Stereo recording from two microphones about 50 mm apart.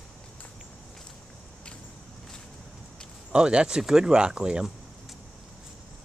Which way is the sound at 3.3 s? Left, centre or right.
Centre.